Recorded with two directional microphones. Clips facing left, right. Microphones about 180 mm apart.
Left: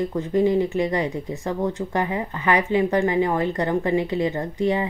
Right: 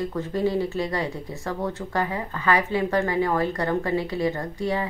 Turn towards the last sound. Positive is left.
turn(degrees=20)  # may be behind; listen again after turning